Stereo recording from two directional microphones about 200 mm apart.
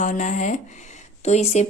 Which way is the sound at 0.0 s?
40° left (ahead or behind).